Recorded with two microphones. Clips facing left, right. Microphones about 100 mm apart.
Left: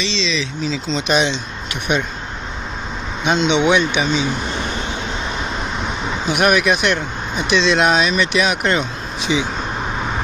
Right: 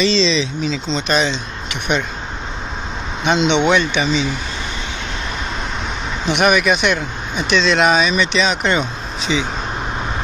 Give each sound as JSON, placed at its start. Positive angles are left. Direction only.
{"t": 0.0, "sound": "speech", "side_deg": -35}
{"t": 0.7, "sound": "speech", "side_deg": 5}
{"t": 3.3, "sound": "speech", "side_deg": 5}
{"t": 6.2, "sound": "speech", "side_deg": 5}